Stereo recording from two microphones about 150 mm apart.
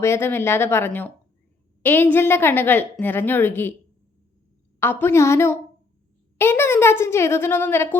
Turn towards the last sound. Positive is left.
turn(degrees=15)  # may be behind; listen again after turning